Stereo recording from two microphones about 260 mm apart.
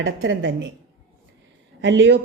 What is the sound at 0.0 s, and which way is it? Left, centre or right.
Speech, right.